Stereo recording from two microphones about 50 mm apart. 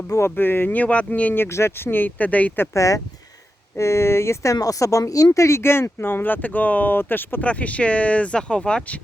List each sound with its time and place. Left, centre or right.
0.2 s speech: left
1.5 s speech: left
3.8 s speech: left
7.4 s speech: left